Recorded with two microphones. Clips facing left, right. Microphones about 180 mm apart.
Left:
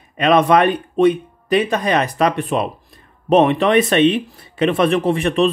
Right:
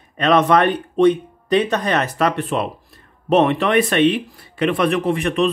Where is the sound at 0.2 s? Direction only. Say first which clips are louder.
Left 1 dB; 10° left (ahead or behind).